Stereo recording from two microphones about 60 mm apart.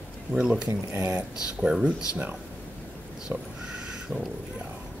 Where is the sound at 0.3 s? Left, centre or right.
Centre.